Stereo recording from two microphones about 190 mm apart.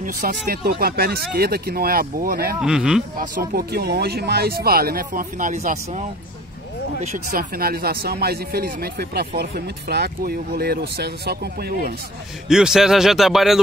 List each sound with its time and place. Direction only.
0.0 s speech: 45° right (ahead or behind)
2.6 s speech: 5° right (ahead or behind)
3.2 s speech: 50° right (ahead or behind)
12.4 s speech: 5° right (ahead or behind)